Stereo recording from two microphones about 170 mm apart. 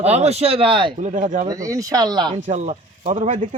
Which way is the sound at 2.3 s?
45° right (ahead or behind).